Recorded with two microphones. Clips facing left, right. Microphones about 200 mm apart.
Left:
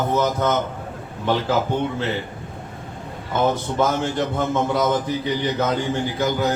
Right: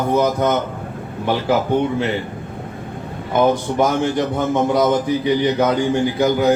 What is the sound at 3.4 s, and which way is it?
A man's voice, 15° right (ahead or behind).